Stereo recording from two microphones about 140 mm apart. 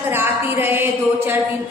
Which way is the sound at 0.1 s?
15° right (ahead or behind).